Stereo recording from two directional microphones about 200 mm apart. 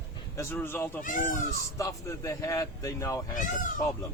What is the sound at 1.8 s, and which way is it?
Speech, 15° left (ahead or behind).